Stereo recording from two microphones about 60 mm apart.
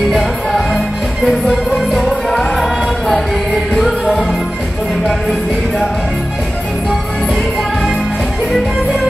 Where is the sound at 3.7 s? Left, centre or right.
Centre.